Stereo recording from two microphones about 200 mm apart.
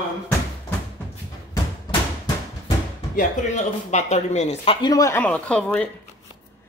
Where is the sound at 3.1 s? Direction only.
35° left (ahead or behind); by 5.9 s 5° left (ahead or behind).